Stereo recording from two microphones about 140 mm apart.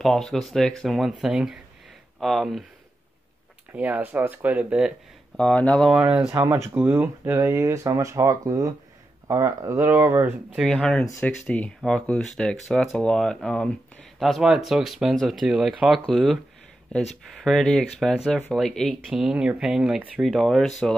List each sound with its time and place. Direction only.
0.0 s speech: centre (ahead or behind)
3.7 s speech: 10° right (ahead or behind)
5.4 s speech: 5° left (ahead or behind)
6.2 s speech: 20° right (ahead or behind)
10.5 s speech: centre (ahead or behind)
17.4 s speech: 5° left (ahead or behind)